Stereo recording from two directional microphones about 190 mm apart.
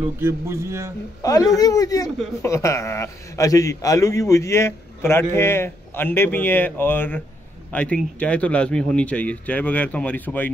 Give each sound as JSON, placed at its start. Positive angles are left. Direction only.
{"t": 0.2, "sound": "a man's voice", "side_deg": -15}
{"t": 1.2, "sound": "a man's voice", "side_deg": 20}